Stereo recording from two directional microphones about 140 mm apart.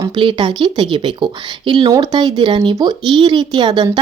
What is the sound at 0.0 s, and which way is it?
Speech, 35° right (ahead or behind).